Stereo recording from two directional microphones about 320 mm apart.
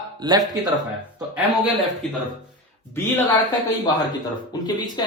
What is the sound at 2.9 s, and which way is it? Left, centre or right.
Speech, centre.